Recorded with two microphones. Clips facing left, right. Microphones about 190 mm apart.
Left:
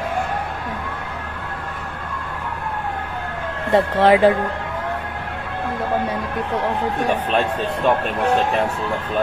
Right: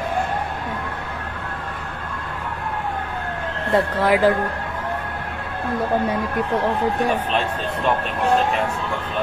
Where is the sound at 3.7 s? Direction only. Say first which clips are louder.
Left 4 dB; 25° left (ahead or behind).